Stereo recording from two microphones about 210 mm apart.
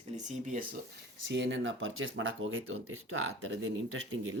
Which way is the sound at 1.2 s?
60° right (ahead or behind).